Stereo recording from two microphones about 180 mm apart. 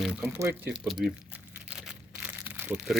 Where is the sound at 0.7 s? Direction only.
5° right (ahead or behind).